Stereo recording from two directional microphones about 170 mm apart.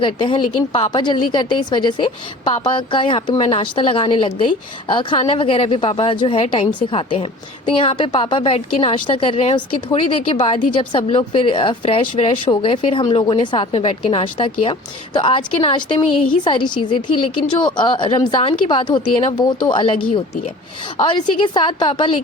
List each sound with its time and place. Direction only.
0.0 s a woman's voice: 30° left (ahead or behind)